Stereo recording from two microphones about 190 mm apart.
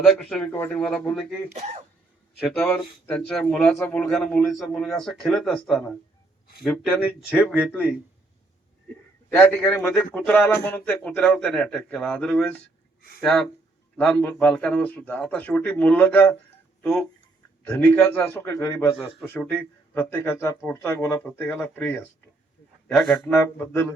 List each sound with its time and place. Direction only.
0.0 s a man's voice: 5° left (ahead or behind)
1.5 s speech: 35° right (ahead or behind)
2.4 s a man's voice: 5° left (ahead or behind)
7.6 s speech: 10° left (ahead or behind)
9.3 s a man's voice: 10° left (ahead or behind)
17.7 s speech: 10° left (ahead or behind)